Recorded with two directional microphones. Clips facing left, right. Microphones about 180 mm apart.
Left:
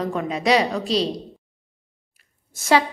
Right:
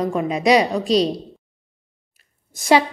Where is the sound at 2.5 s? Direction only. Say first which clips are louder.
Right 3 dB; 15° right (ahead or behind).